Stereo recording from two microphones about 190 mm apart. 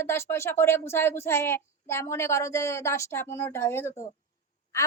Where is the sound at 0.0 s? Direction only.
15° left (ahead or behind).